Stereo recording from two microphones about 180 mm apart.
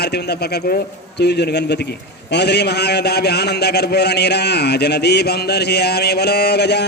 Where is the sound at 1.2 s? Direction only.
70° left (ahead or behind).